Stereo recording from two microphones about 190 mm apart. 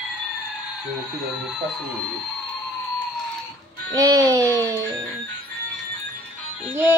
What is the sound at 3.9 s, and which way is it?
A woman's voice, 15° right (ahead or behind).